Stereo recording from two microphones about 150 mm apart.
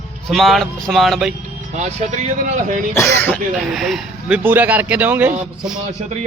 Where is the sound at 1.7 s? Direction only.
50° right (ahead or behind).